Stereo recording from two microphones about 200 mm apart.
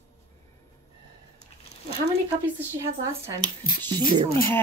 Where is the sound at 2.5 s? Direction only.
15° right (ahead or behind).